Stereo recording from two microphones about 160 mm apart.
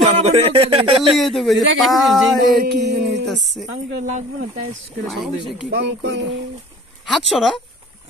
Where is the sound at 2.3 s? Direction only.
75° right (ahead or behind).